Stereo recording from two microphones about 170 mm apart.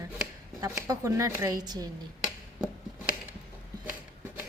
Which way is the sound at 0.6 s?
20° right (ahead or behind).